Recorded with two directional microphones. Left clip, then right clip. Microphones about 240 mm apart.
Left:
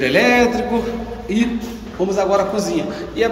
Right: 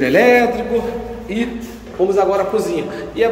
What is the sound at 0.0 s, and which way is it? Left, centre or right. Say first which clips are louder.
A man's voice: right 2 dB; centre.